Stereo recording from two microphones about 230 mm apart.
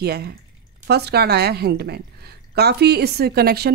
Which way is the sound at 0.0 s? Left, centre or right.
Right.